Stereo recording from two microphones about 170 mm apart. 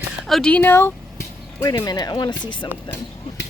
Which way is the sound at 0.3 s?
5° left (ahead or behind).